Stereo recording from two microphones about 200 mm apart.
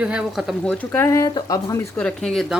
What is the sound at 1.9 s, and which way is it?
Speech, 5° left (ahead or behind).